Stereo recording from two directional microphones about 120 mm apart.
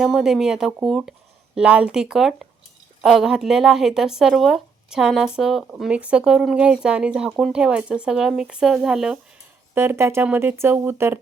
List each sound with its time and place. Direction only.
0.0 s speech: 5° right (ahead or behind)
9.7 s speech: 20° right (ahead or behind)